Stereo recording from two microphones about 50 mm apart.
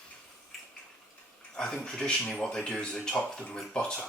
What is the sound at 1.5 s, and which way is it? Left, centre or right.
Speech, centre.